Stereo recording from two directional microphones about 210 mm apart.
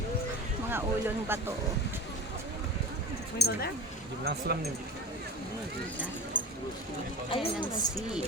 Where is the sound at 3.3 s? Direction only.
50° left (ahead or behind).